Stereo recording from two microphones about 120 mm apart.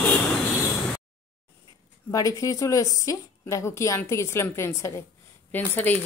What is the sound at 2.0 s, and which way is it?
A woman's voice, 30° left (ahead or behind).